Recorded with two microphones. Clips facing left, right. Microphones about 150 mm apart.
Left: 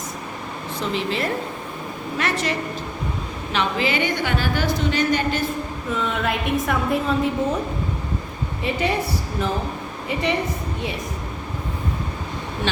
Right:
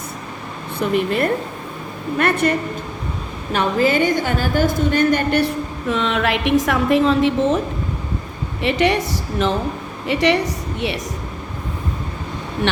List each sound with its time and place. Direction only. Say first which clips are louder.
0.8 s a woman's voice: right 6 dB; 55° right (ahead or behind)
5.9 s a woman's voice: right 5 dB; 90° right
8.6 s a woman's voice: right 5 dB; 80° right